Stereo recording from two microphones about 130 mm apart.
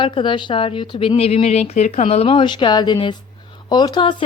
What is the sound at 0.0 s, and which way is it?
Speech, 40° left (ahead or behind).